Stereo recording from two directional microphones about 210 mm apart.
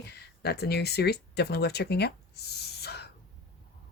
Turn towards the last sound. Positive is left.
turn(degrees=50)  # may be behind; listen again after turning